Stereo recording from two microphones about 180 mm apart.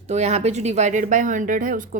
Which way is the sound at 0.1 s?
40° right (ahead or behind).